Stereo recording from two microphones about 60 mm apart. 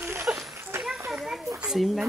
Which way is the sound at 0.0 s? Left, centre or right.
Right.